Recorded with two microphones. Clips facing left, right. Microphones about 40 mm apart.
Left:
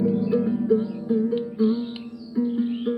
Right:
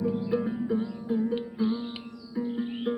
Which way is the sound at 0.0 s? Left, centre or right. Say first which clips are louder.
Left 6 dB; centre.